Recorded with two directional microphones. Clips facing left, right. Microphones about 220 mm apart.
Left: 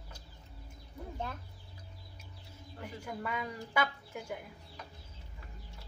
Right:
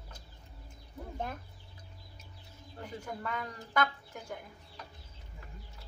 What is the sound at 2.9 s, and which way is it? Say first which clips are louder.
Speech: even; 10° left (ahead or behind).